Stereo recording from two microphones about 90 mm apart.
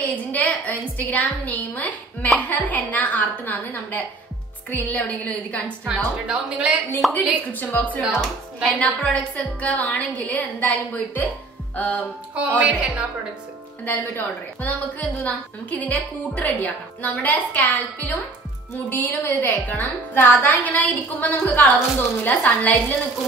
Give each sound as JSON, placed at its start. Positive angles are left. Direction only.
{"t": 0.0, "sound": "a woman's voice", "side_deg": 15}
{"t": 5.9, "sound": "a woman's voice", "side_deg": -10}
{"t": 7.0, "sound": "a woman's voice", "side_deg": 0}
{"t": 7.5, "sound": "a woman's voice", "side_deg": 20}
{"t": 8.0, "sound": "a woman's voice", "side_deg": -5}
{"t": 8.6, "sound": "a woman's voice", "side_deg": 15}
{"t": 12.4, "sound": "a woman's voice", "side_deg": -15}
{"t": 13.8, "sound": "a woman's voice", "side_deg": 20}